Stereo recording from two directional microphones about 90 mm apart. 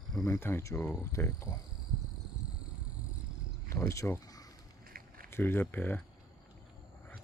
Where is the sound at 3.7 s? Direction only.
35° left (ahead or behind).